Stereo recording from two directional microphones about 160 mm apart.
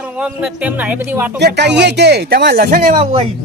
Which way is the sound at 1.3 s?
90° right.